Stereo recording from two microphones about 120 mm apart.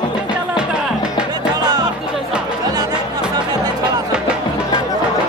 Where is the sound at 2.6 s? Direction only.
35° right (ahead or behind).